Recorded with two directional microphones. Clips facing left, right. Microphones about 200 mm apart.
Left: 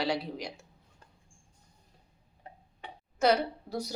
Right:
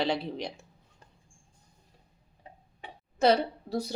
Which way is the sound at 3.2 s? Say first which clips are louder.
Right 2 dB; 30° right (ahead or behind).